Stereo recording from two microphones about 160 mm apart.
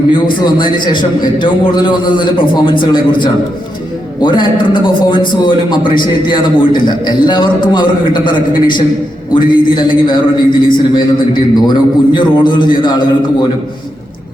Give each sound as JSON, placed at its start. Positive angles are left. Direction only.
{"t": 0.4, "sound": "a man's voice", "side_deg": 30}